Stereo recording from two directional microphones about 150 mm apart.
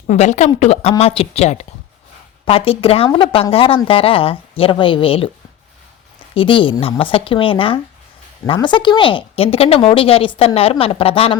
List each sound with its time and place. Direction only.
0.1 s a woman's voice: 50° left (ahead or behind)
6.3 s a woman's voice: 35° left (ahead or behind)